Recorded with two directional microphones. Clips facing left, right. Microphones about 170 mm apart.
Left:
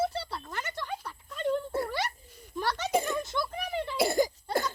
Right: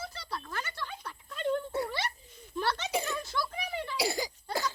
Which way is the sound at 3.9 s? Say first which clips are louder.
Left 7 dB; 50° left (ahead or behind).